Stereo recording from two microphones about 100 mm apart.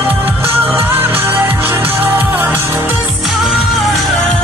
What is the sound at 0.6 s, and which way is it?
Music, 20° right (ahead or behind).